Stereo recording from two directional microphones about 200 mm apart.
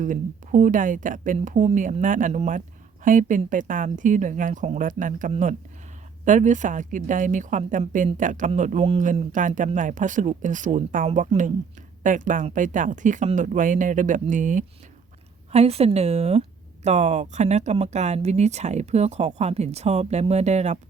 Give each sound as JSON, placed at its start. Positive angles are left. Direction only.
{"t": 0.0, "sound": "a woman's voice", "side_deg": -40}